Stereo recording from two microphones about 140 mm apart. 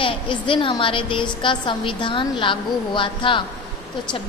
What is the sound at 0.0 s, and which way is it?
A woman's voice, 35° left (ahead or behind).